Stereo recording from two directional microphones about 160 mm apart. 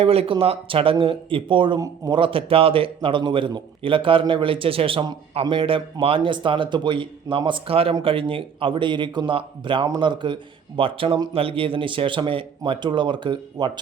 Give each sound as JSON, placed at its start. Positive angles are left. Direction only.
{"t": 0.0, "sound": "a man's voice", "side_deg": -35}